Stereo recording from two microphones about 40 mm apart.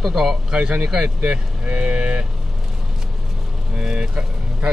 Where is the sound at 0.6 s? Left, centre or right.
Right.